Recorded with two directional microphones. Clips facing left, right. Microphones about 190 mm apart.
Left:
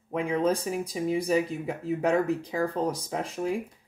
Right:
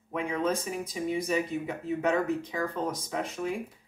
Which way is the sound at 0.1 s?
30° left (ahead or behind).